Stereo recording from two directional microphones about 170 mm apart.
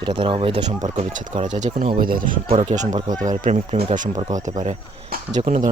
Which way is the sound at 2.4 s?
40° right (ahead or behind).